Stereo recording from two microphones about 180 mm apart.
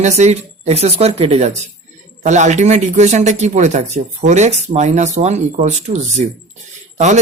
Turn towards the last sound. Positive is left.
turn(degrees=-40)  # may be behind; listen again after turning